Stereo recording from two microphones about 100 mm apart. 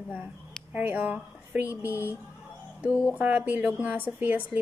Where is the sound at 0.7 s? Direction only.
15° right (ahead or behind).